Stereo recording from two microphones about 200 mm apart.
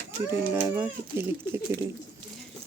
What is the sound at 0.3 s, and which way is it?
Speech, 15° right (ahead or behind).